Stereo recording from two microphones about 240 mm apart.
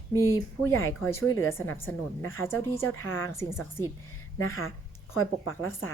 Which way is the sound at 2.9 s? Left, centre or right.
Left.